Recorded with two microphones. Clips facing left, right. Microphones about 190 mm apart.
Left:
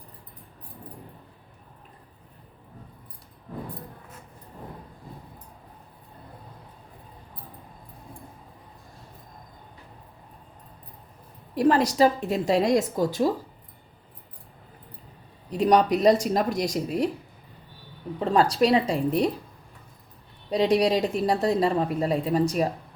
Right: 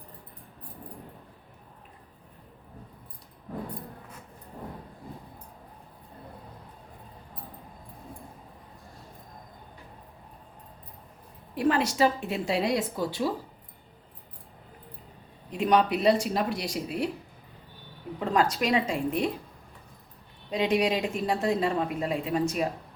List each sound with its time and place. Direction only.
11.5 s a woman's voice: 40° left (ahead or behind)
15.4 s a woman's voice: 35° left (ahead or behind)
18.3 s a woman's voice: 35° left (ahead or behind)
20.5 s a woman's voice: 35° left (ahead or behind)